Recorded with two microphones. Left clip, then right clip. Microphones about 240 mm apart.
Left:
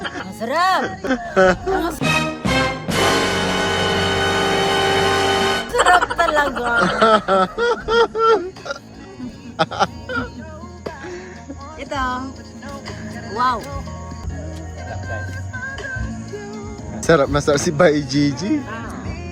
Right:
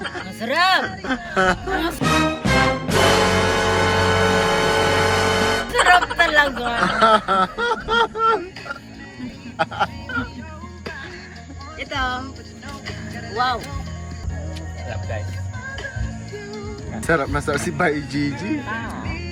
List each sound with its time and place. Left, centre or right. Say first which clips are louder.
0.3 s speech: even; centre
2.0 s music: even; centre
6.9 s speech: even; left
9.7 s speech: left 3 dB; left
12.0 s speech: left 2 dB; left
13.3 s speech: left 2 dB; left
17.0 s speech: left 5 dB; left